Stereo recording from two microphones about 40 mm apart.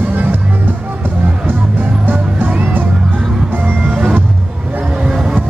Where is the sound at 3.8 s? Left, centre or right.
Right.